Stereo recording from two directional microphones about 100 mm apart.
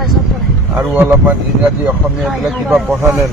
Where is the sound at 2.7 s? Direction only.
15° right (ahead or behind).